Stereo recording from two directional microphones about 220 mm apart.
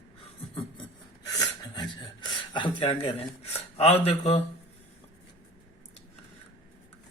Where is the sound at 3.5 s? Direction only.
25° left (ahead or behind).